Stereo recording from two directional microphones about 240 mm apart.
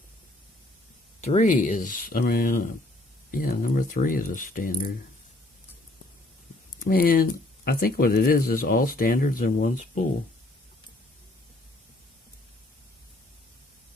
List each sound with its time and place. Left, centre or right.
1.2 s speech: left
6.8 s speech: left